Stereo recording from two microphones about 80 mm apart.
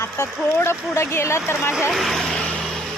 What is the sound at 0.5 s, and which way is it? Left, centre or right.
Speech, left.